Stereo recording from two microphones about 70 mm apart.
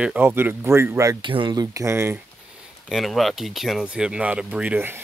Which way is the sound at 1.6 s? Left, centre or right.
Right.